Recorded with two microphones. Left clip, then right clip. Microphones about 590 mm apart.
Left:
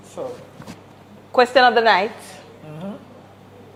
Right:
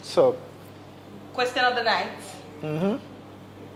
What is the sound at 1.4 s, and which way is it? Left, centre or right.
Speech, left.